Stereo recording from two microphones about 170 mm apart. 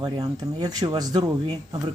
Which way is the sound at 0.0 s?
25° right (ahead or behind).